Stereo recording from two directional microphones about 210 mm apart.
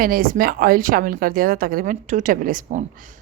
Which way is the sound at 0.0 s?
40° right (ahead or behind).